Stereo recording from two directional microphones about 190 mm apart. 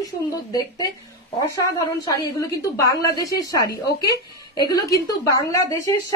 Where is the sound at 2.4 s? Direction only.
20° left (ahead or behind).